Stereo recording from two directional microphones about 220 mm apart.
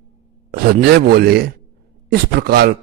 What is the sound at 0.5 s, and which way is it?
Speech, 45° right (ahead or behind).